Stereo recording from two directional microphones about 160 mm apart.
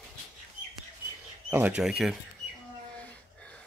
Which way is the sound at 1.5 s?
10° right (ahead or behind).